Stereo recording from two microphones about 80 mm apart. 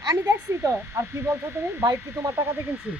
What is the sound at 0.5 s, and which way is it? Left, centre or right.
Speech, right.